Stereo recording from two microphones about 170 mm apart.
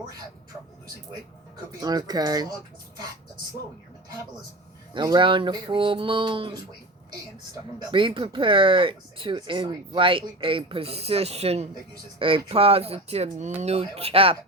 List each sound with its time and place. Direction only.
1.8 s speech: 25° right (ahead or behind)
4.9 s speech: 25° right (ahead or behind)